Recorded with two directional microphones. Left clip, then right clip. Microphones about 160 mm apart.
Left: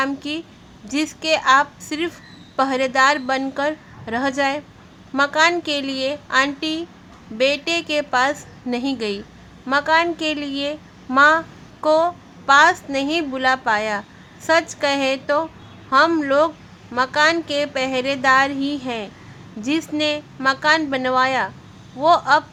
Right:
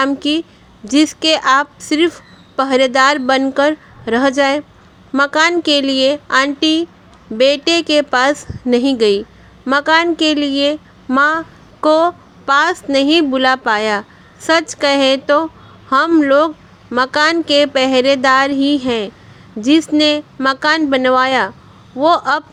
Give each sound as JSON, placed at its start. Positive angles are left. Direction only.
{"t": 0.0, "sound": "a woman's voice", "side_deg": -30}